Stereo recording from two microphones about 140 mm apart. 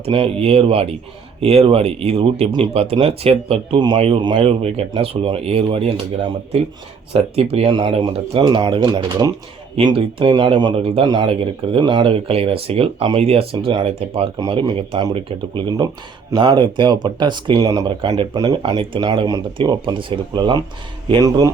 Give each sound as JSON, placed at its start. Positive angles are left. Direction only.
{"t": 0.0, "sound": "speech", "side_deg": -45}
{"t": 4.4, "sound": "speech", "side_deg": -45}
{"t": 7.1, "sound": "speech", "side_deg": -45}
{"t": 10.8, "sound": "speech", "side_deg": -45}
{"t": 11.0, "sound": "speech", "side_deg": -30}
{"t": 14.3, "sound": "speech", "side_deg": -30}
{"t": 17.6, "sound": "speech", "side_deg": -25}